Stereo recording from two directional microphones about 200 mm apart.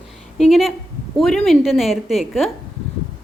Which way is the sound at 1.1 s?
Centre (ahead or behind).